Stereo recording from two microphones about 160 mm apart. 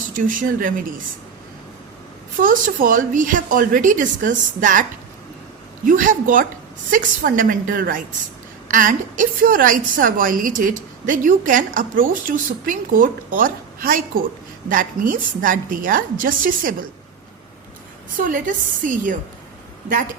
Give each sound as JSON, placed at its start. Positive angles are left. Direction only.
{"t": 0.2, "sound": "a woman's voice", "side_deg": -55}
{"t": 2.4, "sound": "a woman's voice", "side_deg": -60}
{"t": 18.2, "sound": "a woman's voice", "side_deg": -55}